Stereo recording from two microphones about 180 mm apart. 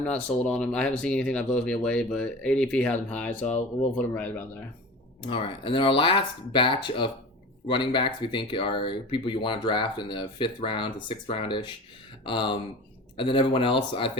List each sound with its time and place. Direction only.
0.0 s speech: 5° left (ahead or behind)
3.4 s speech: 40° left (ahead or behind)
3.9 s speech: 10° left (ahead or behind)
5.2 s speech: 30° left (ahead or behind)